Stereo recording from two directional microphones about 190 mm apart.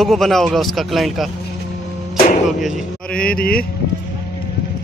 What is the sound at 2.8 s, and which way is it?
Speech, 5° left (ahead or behind).